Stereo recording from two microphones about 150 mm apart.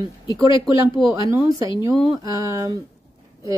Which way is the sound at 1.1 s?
20° right (ahead or behind).